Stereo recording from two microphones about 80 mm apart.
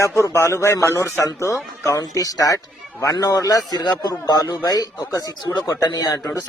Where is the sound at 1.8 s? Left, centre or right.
Left.